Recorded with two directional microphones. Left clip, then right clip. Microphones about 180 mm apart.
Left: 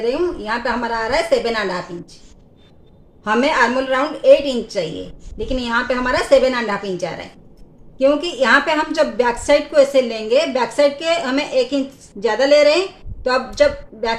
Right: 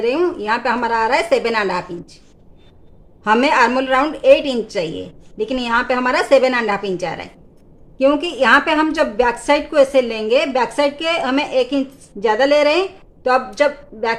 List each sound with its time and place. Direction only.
0.0 s a woman's voice: 25° right (ahead or behind)
3.2 s a woman's voice: 25° right (ahead or behind)